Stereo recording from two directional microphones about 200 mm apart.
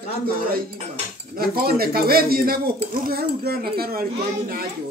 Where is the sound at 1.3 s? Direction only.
50° right (ahead or behind).